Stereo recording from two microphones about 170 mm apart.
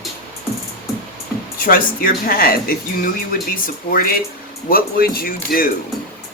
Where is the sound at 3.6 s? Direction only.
60° left (ahead or behind).